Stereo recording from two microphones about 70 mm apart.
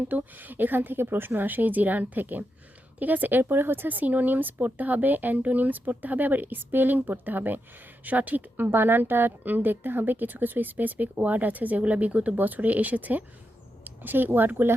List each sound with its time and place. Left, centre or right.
0.1 s a woman's voice: right